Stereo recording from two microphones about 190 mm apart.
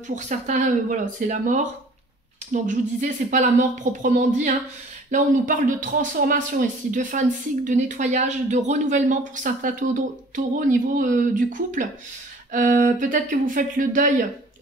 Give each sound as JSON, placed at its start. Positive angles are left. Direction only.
{"t": 0.1, "sound": "a woman's voice", "side_deg": -40}